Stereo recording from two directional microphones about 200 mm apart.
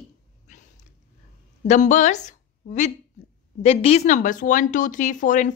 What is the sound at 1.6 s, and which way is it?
A woman's voice, 35° left (ahead or behind).